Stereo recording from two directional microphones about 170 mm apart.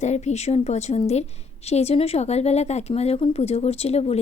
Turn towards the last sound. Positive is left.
turn(degrees=40)  # may be behind; listen again after turning